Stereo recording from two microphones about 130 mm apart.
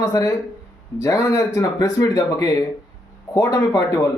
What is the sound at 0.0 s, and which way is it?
Speech, 25° left (ahead or behind).